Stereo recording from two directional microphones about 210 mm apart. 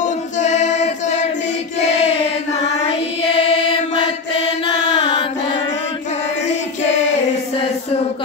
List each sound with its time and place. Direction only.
0.0 s choir: 35° left (ahead or behind)
1.8 s child singing: 30° left (ahead or behind)
2.8 s chant: 25° left (ahead or behind)